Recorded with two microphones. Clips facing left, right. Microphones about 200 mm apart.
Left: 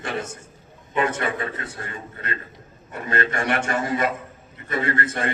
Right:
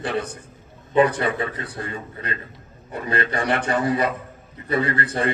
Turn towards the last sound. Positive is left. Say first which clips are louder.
# right 2 dB
turn(degrees=-35)  # may be behind; listen again after turning